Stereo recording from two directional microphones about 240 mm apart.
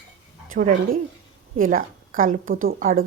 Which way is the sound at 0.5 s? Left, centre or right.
Right.